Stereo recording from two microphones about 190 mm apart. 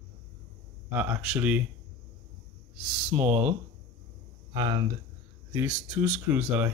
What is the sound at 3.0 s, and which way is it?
Speech, 10° right (ahead or behind).